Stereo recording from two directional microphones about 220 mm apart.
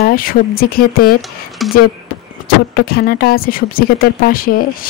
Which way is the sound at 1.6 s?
Centre (ahead or behind).